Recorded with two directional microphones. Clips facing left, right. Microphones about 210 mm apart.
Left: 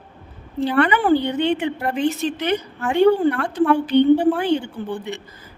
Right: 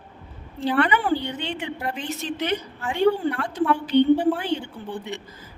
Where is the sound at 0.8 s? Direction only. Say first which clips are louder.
Left 6 dB; 55° left (ahead or behind).